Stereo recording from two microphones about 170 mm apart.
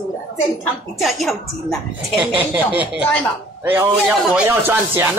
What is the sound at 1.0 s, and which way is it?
Speech, centre (ahead or behind).